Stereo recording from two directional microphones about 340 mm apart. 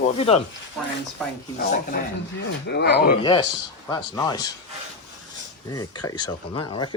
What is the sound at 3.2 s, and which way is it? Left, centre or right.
Speech, centre.